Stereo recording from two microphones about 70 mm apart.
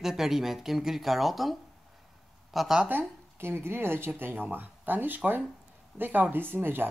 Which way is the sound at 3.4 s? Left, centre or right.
Right.